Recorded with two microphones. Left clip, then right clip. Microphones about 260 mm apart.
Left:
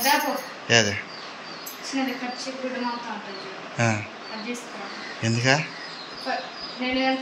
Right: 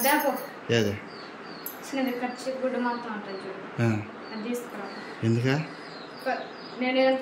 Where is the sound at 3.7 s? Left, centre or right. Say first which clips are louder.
Left 5 dB; centre.